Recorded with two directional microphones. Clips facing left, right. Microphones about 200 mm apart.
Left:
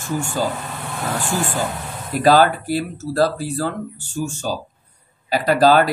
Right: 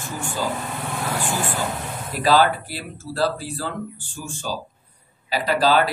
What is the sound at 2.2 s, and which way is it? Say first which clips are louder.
Speech: left 4 dB; 45° left (ahead or behind).